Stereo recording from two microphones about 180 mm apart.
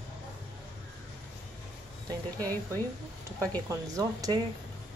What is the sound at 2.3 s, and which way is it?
Speech, 10° left (ahead or behind).